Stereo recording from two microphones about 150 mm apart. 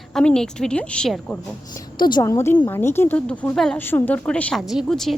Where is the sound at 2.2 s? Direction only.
15° left (ahead or behind).